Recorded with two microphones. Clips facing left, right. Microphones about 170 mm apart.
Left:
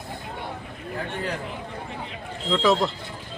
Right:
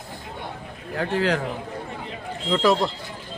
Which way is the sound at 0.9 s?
90° right.